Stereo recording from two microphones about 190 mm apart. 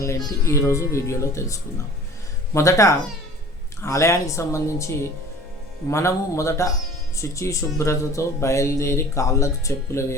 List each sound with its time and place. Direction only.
0.3 s speech: 15° left (ahead or behind)